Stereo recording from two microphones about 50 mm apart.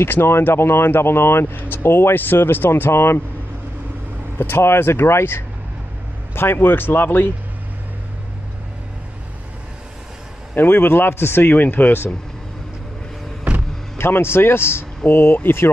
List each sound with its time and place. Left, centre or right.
0.0 s speech: left
4.4 s speech: left
10.5 s speech: left
11.5 s speech: left
13.5 s vehicle: right
13.9 s a man's voice: left